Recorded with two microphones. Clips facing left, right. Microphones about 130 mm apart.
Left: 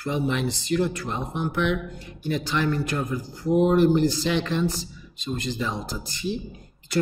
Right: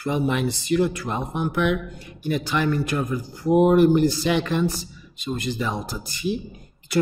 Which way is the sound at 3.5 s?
60° right (ahead or behind).